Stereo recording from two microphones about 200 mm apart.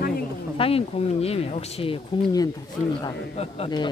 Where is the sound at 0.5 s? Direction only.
30° left (ahead or behind).